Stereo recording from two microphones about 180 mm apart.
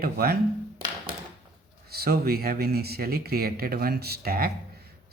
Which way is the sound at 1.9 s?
60° right (ahead or behind).